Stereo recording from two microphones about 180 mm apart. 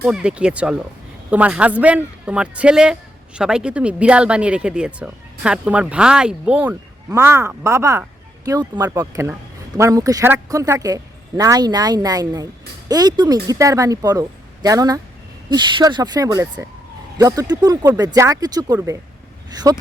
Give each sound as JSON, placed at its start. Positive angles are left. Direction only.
{"t": 0.0, "sound": "a man's voice", "side_deg": -5}